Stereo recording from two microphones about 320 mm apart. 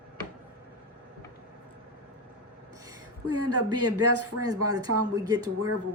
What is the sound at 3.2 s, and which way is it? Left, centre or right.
A man's voice, right.